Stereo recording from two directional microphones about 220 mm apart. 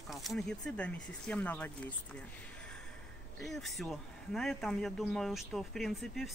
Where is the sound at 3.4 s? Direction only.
Centre (ahead or behind).